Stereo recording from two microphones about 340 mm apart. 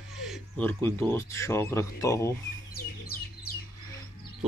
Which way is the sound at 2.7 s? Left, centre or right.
Left.